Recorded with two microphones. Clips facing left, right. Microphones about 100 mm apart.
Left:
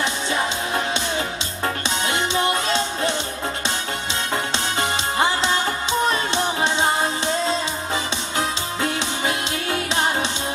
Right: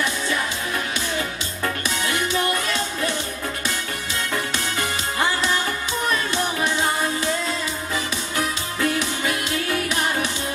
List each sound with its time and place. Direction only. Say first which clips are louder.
0.0 s music: left 1 dB; 25° left (ahead or behind)
4.3 s music: left 2 dB; 25° left (ahead or behind)